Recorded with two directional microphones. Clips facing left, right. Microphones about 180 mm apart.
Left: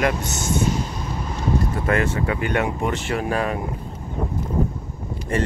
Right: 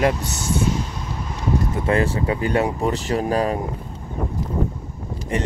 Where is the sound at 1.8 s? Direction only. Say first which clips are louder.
Right 3 dB; 30° right (ahead or behind).